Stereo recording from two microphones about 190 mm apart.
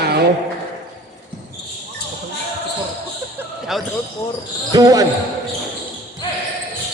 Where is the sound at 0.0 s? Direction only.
60° right (ahead or behind).